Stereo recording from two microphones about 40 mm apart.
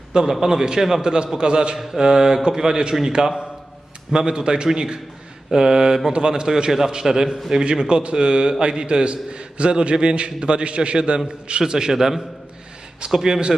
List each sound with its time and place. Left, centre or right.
0.3 s speech: centre
1.0 s a man's voice: centre
11.6 s speech: centre